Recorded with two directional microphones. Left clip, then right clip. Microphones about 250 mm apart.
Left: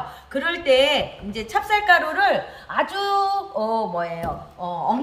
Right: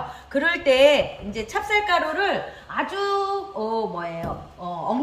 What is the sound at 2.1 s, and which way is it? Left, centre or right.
Speech, centre.